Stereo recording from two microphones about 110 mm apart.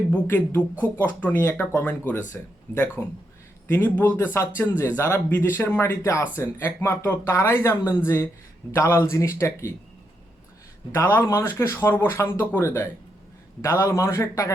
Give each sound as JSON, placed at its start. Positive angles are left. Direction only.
{"t": 0.1, "sound": "speech", "side_deg": 15}
{"t": 10.9, "sound": "speech", "side_deg": 20}